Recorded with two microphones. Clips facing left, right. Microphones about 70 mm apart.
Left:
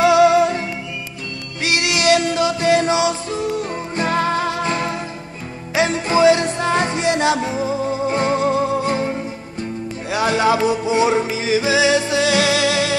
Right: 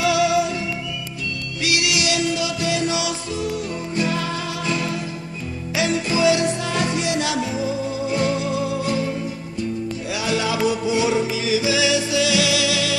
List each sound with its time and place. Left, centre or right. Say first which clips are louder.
0.0 s music: left 6 dB; left
1.6 s music: left 3 dB; left
10.1 s music: left 7 dB; left